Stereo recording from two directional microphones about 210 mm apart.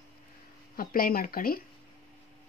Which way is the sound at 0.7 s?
45° left (ahead or behind).